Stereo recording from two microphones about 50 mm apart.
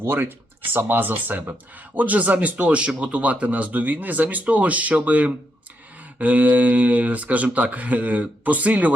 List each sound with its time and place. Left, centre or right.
0.0 s speech: right